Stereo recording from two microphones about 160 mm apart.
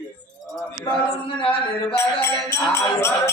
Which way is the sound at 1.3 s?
35° left (ahead or behind).